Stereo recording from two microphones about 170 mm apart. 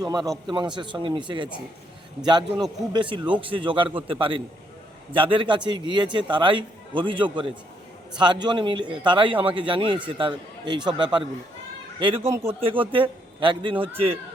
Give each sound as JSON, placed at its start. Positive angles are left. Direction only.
{"t": 0.0, "sound": "a man's voice", "side_deg": -20}
{"t": 12.2, "sound": "a man's voice", "side_deg": -15}
{"t": 12.6, "sound": "a man's voice", "side_deg": -30}